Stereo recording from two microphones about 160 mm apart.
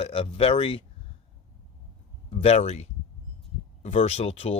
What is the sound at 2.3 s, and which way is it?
Speech, 40° left (ahead or behind).